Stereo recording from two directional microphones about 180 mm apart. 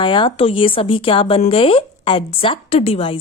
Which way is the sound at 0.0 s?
30° left (ahead or behind).